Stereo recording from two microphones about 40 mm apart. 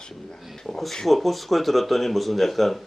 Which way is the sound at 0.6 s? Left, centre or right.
Centre.